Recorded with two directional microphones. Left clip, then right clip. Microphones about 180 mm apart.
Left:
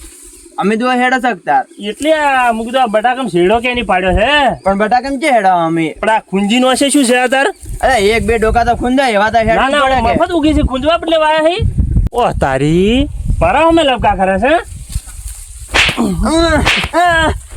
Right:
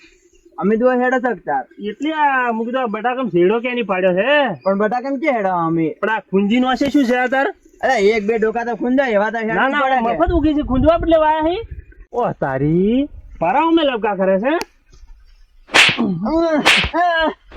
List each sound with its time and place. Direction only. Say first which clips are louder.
0.5 s speech: left 2 dB; 30° left (ahead or behind)
2.0 s speech: left 6 dB; 50° left (ahead or behind)
4.6 s speech: left 6 dB; 20° left (ahead or behind)
6.0 s a man's voice: left 5 dB; 50° left (ahead or behind)
7.8 s speech: left 4 dB; centre (ahead or behind)
8.3 s speech: left 7 dB; 15° left (ahead or behind)
9.6 s a man's voice: left 5 dB; 40° left (ahead or behind); by 13.1 s 25° left (ahead or behind)
13.4 s speech: left 5 dB; 45° left (ahead or behind)
15.7 s whip: even; centre (ahead or behind)
16.2 s a man's voice: left 5 dB; 35° left (ahead or behind)
16.6 s speech: even; centre (ahead or behind)